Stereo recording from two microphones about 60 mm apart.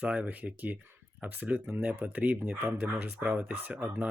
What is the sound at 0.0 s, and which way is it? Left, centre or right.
Speech, right.